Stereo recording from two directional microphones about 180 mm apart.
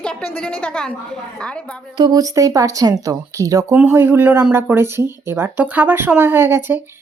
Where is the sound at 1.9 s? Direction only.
25° right (ahead or behind).